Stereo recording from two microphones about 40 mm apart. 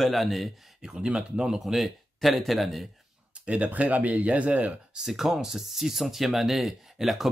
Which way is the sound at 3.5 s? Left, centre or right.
Right.